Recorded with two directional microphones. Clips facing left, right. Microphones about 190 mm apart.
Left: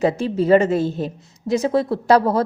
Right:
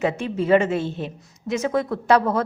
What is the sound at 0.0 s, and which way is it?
A woman's voice, 35° left (ahead or behind).